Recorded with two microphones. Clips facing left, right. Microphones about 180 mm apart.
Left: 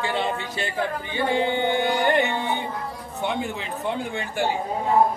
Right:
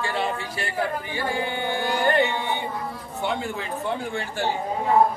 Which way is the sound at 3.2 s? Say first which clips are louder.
Even; 20° left (ahead or behind).